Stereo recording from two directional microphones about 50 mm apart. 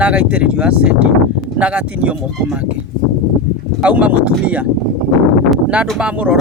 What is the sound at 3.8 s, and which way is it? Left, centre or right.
Speech, right.